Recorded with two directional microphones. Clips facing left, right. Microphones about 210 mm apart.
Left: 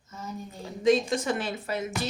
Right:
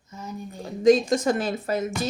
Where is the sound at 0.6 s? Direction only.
40° right (ahead or behind).